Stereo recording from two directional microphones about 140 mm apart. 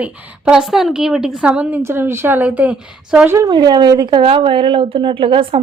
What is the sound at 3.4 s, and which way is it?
A woman's voice, 30° right (ahead or behind).